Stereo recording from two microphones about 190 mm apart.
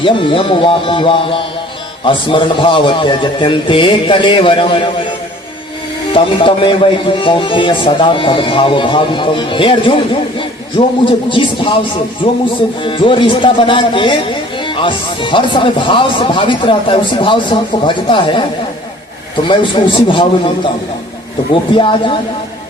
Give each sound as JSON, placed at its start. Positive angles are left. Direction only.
{"t": 0.0, "sound": "speech", "side_deg": 25}
{"t": 6.1, "sound": "speech", "side_deg": 25}
{"t": 19.5, "sound": "speech", "side_deg": 25}
{"t": 21.8, "sound": "speech", "side_deg": 25}